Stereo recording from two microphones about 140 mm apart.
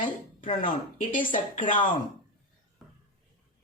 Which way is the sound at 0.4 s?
55° left (ahead or behind).